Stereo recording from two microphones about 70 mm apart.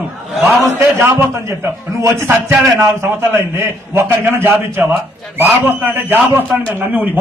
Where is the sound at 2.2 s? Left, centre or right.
Right.